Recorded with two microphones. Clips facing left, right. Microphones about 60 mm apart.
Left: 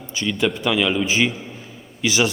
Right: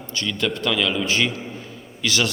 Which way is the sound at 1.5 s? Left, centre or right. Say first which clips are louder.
Right 2 dB; centre.